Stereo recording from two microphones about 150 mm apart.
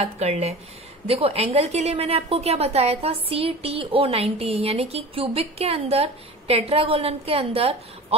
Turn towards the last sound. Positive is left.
turn(degrees=-40)  # may be behind; listen again after turning